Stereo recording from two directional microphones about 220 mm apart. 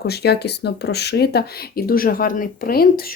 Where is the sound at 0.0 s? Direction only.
45° left (ahead or behind).